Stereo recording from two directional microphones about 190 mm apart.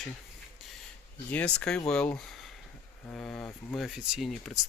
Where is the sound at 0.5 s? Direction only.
Centre (ahead or behind).